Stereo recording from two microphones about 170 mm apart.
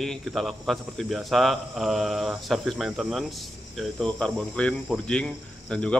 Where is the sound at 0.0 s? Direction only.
Centre (ahead or behind).